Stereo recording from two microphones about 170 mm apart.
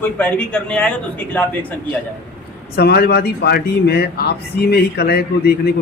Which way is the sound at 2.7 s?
70° left (ahead or behind).